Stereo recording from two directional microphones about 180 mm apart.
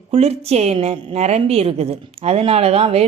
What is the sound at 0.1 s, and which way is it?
A woman's voice, 35° right (ahead or behind).